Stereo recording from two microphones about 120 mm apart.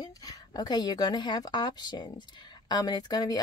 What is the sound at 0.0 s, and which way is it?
A woman's voice, 35° left (ahead or behind).